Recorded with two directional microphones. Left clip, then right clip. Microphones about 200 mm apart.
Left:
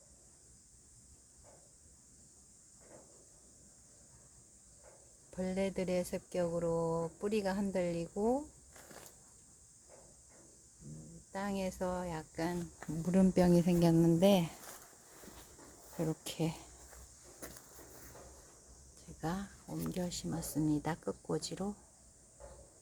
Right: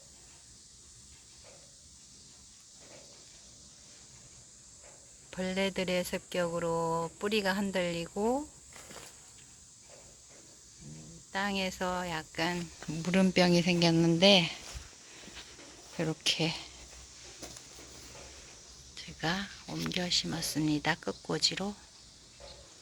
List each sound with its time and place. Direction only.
5.3 s speech: 5° left (ahead or behind)
6.7 s a sound: 15° right (ahead or behind)
7.2 s speech: 5° left (ahead or behind)
11.3 s speech: 5° left (ahead or behind)
13.3 s a woman's voice: 15° left (ahead or behind)
13.9 s a woman's voice: 5° left (ahead or behind)
16.2 s a woman's voice: 5° left (ahead or behind)
18.9 s a sound: 5° left (ahead or behind)
19.9 s a woman's voice: 5° left (ahead or behind)